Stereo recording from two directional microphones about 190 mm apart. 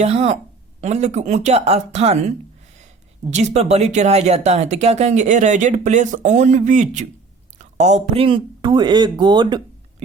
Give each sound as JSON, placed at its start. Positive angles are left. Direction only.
{"t": 0.0, "sound": "speech", "side_deg": -35}